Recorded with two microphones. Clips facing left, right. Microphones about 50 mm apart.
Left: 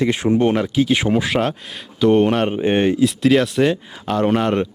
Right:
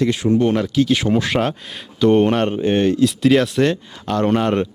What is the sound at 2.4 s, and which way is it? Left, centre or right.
Speech, centre.